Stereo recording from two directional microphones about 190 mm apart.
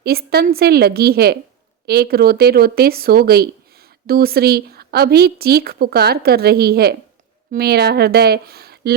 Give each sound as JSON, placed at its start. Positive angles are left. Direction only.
{"t": 0.0, "sound": "speech", "side_deg": -55}